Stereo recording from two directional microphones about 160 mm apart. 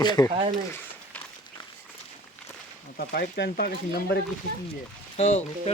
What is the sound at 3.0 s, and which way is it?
Speech, 75° left (ahead or behind).